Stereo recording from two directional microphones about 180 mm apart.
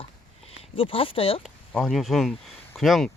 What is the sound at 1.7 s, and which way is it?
Speech, centre (ahead or behind).